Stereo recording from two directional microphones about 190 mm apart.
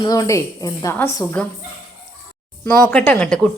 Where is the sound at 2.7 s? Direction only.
5° left (ahead or behind).